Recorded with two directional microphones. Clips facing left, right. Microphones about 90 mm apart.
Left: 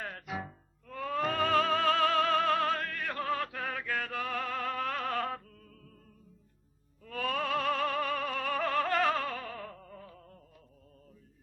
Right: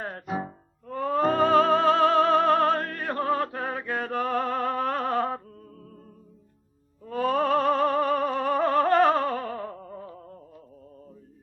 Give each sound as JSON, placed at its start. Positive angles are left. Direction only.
{"t": 0.0, "sound": "music", "side_deg": -35}
{"t": 7.0, "sound": "music", "side_deg": -30}